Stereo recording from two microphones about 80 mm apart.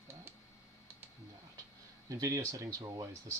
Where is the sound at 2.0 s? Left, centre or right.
Right.